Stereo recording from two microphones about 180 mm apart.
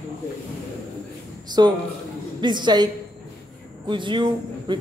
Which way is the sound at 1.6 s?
25° right (ahead or behind).